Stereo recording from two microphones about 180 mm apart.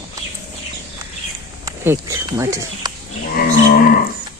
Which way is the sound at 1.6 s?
20° right (ahead or behind).